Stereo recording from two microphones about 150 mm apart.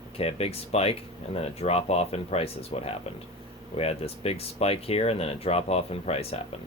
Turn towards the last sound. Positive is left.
turn(degrees=40)  # may be behind; listen again after turning